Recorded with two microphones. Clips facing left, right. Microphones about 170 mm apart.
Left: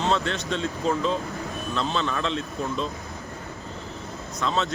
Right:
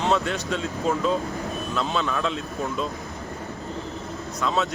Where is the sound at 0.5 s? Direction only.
5° right (ahead or behind).